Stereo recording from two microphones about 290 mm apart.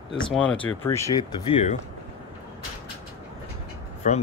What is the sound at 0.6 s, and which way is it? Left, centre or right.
Speech, centre.